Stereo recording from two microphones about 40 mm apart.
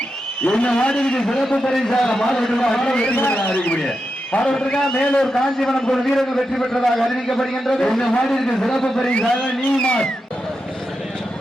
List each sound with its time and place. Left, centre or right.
0.4 s a man's voice: left
1.2 s a man's voice: centre
3.2 s speech: left
4.3 s a man's voice: left
4.9 s a man's voice: left
5.2 s a man's voice: centre
9.4 s a man's voice: left